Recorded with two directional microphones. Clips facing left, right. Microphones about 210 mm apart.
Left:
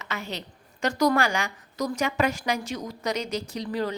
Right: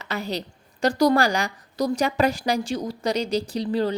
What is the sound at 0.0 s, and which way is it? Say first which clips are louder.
A woman's voice: right 6 dB; 35° right (ahead or behind).